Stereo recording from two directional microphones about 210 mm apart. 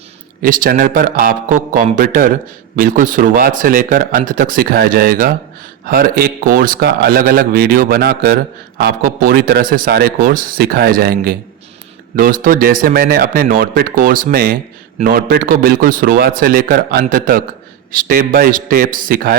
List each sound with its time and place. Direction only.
0.4 s a man's voice: 45° right (ahead or behind)